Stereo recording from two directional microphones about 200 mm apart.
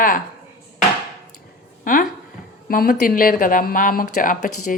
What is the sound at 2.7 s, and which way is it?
A woman's voice, 45° left (ahead or behind).